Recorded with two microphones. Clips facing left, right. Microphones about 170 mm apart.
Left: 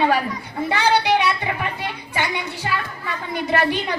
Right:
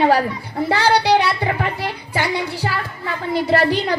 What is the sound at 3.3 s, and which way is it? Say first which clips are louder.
Speech: right 4 dB; 35° right (ahead or behind).